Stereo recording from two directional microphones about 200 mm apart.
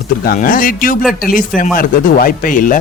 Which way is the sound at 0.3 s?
45° left (ahead or behind).